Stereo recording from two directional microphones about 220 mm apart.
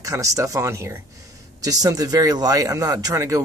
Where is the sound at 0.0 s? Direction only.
15° right (ahead or behind).